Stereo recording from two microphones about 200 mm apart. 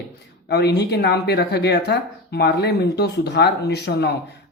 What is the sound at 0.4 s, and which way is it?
Speech, 55° left (ahead or behind).